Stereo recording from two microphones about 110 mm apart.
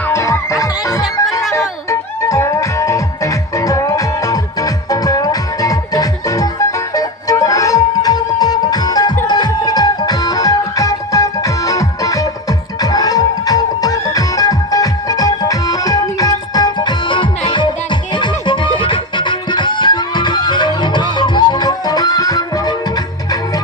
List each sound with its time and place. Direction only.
0.1 s music: 25° left (ahead or behind)